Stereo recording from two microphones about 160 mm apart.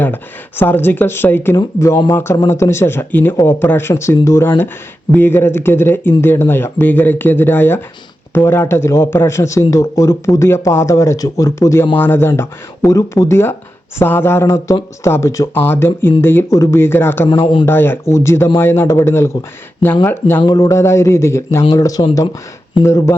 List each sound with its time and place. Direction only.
0.0 s a man's voice: 10° left (ahead or behind)
17.4 s speech: 30° left (ahead or behind)
17.7 s a man's voice: 15° left (ahead or behind)